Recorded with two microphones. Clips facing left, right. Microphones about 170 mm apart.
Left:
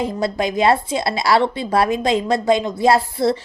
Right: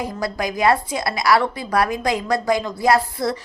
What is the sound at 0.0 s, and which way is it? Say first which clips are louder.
Speech: left 4 dB; 25° left (ahead or behind).